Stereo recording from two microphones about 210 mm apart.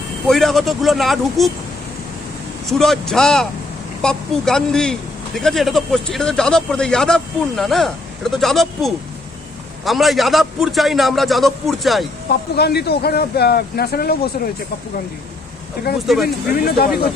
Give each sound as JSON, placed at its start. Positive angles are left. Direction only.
{"t": 0.3, "sound": "a man's voice", "side_deg": 0}
{"t": 2.6, "sound": "a man's voice", "side_deg": 0}
{"t": 12.3, "sound": "speech", "side_deg": 50}
{"t": 16.2, "sound": "speech", "side_deg": 45}